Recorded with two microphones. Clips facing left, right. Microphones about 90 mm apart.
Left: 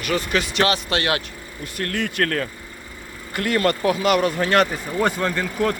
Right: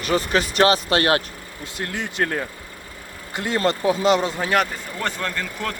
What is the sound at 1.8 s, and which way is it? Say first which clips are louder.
Speech: left 2 dB; 20° right (ahead or behind).